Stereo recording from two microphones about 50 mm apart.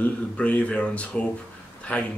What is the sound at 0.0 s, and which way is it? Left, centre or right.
Speech, left.